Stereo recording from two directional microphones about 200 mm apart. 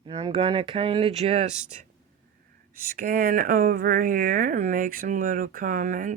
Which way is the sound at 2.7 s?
45° right (ahead or behind).